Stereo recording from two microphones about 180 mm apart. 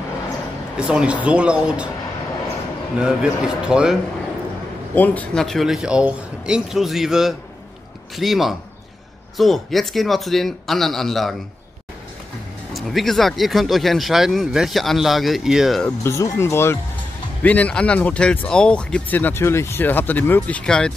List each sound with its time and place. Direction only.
0.7 s speech: 5° right (ahead or behind)
3.0 s speech: 5° right (ahead or behind)
4.9 s speech: 10° left (ahead or behind)
12.7 s speech: centre (ahead or behind)
16.0 s speech: 15° left (ahead or behind)